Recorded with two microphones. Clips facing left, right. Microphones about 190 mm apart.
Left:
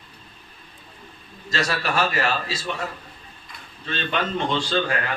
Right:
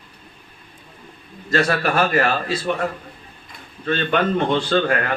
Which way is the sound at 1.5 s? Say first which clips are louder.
Right 6 dB; 55° right (ahead or behind).